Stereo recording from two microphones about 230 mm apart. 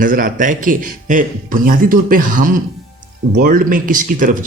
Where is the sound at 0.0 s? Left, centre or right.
Right.